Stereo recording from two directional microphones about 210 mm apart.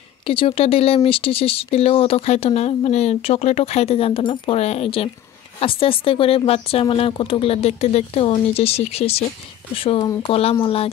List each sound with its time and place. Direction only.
0.3 s speech: 25° left (ahead or behind)